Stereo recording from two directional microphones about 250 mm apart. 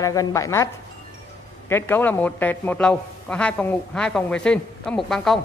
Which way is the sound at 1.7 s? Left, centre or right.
Centre.